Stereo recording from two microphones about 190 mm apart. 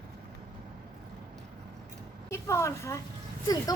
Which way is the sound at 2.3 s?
15° left (ahead or behind).